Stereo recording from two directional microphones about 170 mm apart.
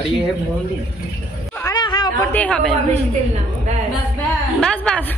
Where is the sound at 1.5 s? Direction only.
20° left (ahead or behind).